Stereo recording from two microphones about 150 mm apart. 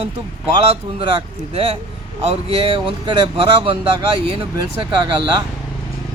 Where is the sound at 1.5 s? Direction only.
40° right (ahead or behind).